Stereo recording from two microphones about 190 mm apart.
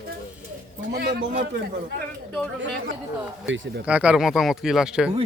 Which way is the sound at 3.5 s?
80° right.